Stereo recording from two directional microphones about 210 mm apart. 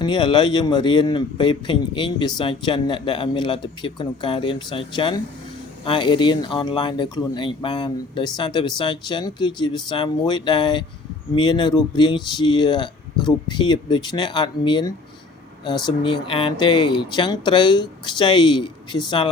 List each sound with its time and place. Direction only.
0.0 s speech: 20° left (ahead or behind)